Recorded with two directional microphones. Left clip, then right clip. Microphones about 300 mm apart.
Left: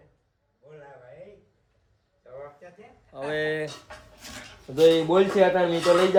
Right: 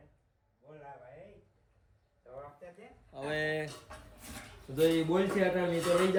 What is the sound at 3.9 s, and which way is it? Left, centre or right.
Dishes, left.